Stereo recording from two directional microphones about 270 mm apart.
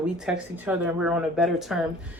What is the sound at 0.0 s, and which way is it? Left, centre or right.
Speech, centre.